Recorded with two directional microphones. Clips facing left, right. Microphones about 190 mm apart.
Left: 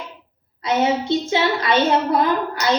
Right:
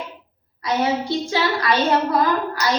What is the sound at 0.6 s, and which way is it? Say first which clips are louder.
A woman's voice: left 2 dB; 25° left (ahead or behind).